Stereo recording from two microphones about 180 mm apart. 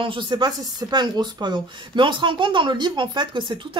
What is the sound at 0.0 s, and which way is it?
Speech, 25° right (ahead or behind).